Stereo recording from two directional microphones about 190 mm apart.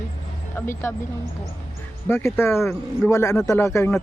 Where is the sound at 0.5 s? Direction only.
15° left (ahead or behind).